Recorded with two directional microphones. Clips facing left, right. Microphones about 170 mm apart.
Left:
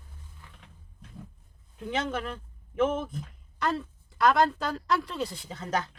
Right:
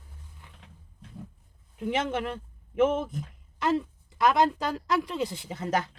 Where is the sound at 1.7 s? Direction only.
20° right (ahead or behind).